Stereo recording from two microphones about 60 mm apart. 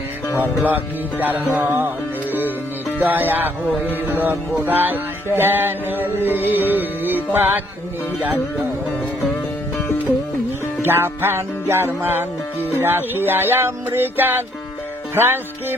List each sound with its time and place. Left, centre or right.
0.3 s music: right
3.0 s music: right
10.8 s music: right